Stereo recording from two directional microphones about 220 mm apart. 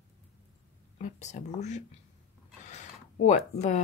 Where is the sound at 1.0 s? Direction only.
35° left (ahead or behind).